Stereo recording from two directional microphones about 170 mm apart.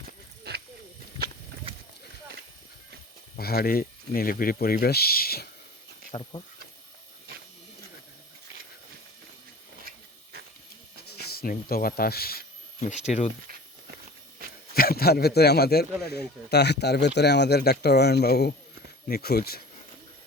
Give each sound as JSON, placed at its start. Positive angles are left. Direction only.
{"t": 0.5, "sound": "a sound", "side_deg": -70}
{"t": 3.3, "sound": "speech", "side_deg": 65}
{"t": 6.1, "sound": "speech", "side_deg": 35}
{"t": 11.1, "sound": "speech", "side_deg": 65}
{"t": 13.1, "sound": "speech", "side_deg": 45}
{"t": 14.8, "sound": "speech", "side_deg": 65}